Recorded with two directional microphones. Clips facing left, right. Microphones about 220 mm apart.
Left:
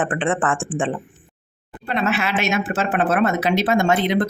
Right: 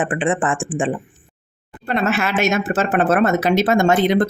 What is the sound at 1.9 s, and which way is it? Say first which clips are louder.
Speech: right 2 dB; 45° right (ahead or behind).